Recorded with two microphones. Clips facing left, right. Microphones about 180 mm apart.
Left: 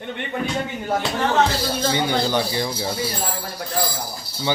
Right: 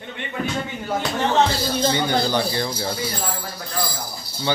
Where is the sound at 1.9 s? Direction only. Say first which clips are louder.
Left 1 dB; 15° left (ahead or behind).